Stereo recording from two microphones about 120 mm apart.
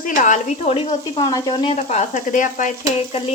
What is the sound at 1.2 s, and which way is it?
Speech, 35° left (ahead or behind).